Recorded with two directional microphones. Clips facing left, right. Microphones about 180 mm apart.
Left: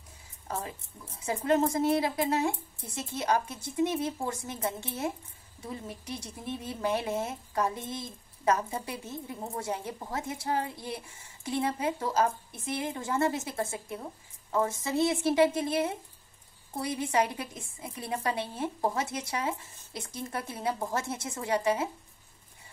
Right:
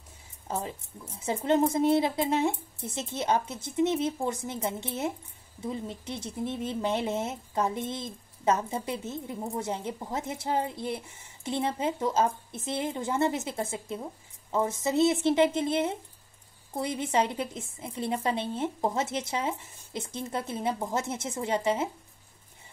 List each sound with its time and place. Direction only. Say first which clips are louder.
1.2 s speech: right 1 dB; 25° right (ahead or behind)